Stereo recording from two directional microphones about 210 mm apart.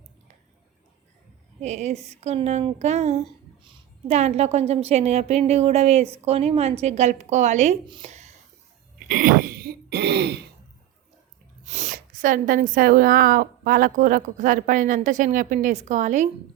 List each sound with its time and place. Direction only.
1.6 s speech: 35° right (ahead or behind)
7.9 s a sound: 25° right (ahead or behind)
9.0 s throat clearing: 40° right (ahead or behind)
11.6 s speech: 35° right (ahead or behind)